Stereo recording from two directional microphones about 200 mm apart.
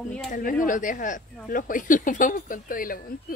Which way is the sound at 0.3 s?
40° left (ahead or behind).